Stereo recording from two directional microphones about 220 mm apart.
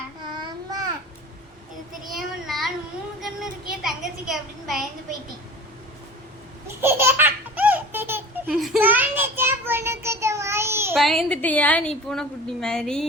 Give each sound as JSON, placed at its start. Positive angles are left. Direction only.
{"t": 0.3, "sound": "babbling", "side_deg": -20}
{"t": 2.1, "sound": "child singing", "side_deg": 0}
{"t": 3.8, "sound": "a sound", "side_deg": 0}
{"t": 6.8, "sound": "laughter", "side_deg": -10}
{"t": 10.9, "sound": "a woman's voice", "side_deg": 0}